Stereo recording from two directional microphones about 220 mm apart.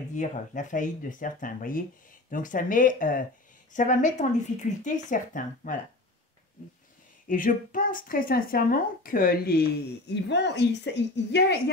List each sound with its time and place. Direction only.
0.1 s speech: 35° left (ahead or behind)
7.2 s speech: 40° left (ahead or behind)